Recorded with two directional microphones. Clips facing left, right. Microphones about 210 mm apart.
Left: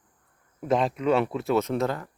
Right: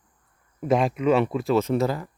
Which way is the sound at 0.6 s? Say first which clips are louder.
Right 3 dB; 10° right (ahead or behind).